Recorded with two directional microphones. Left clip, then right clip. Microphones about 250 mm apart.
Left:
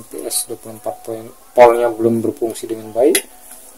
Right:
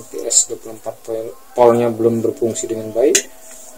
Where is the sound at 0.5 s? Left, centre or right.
Left.